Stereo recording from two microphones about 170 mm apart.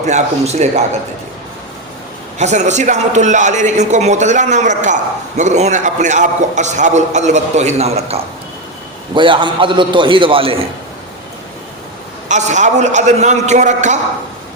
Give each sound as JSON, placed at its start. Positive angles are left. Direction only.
{"t": 0.0, "sound": "a man's voice", "side_deg": -45}
{"t": 2.4, "sound": "a man's voice", "side_deg": -45}
{"t": 12.3, "sound": "a man's voice", "side_deg": -45}